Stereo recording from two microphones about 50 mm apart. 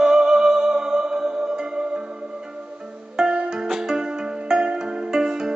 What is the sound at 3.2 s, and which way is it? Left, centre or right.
Music, centre.